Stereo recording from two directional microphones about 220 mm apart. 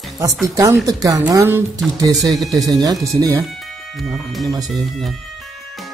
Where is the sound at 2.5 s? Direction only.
15° right (ahead or behind).